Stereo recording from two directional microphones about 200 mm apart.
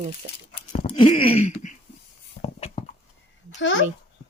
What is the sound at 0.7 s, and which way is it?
Speech, 30° left (ahead or behind).